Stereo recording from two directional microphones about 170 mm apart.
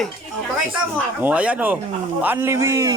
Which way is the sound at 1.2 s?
10° right (ahead or behind).